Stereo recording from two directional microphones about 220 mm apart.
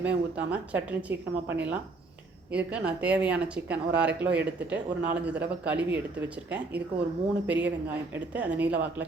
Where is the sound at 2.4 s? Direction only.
5° right (ahead or behind).